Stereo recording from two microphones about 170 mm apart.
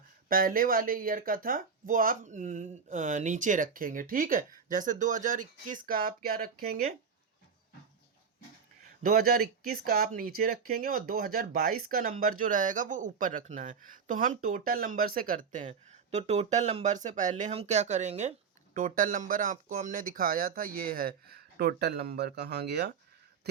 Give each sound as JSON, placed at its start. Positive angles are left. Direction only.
{"t": 0.3, "sound": "speech", "side_deg": -55}
{"t": 9.0, "sound": "speech", "side_deg": -60}
{"t": 16.1, "sound": "speech", "side_deg": -40}